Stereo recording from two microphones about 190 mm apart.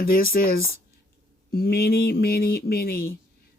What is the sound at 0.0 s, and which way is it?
Speech, 50° left (ahead or behind).